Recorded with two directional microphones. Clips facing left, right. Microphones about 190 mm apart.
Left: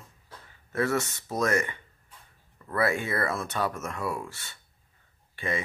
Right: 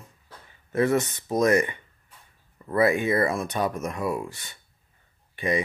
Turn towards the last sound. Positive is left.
turn(degrees=-15)  # may be behind; listen again after turning